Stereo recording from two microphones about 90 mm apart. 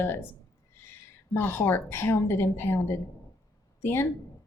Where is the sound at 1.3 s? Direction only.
25° left (ahead or behind).